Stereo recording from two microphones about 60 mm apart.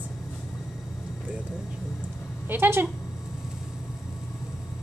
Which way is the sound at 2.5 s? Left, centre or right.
Right.